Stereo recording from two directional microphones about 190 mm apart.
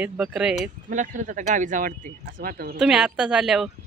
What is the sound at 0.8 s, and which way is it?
Speech, 45° right (ahead or behind).